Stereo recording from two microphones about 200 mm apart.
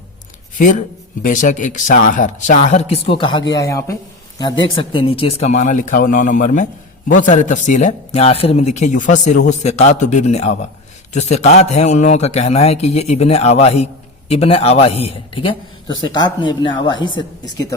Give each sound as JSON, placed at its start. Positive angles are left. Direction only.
{"t": 1.2, "sound": "a man's voice", "side_deg": 40}